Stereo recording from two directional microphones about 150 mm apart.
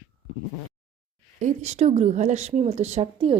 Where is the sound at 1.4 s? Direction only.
50° right (ahead or behind).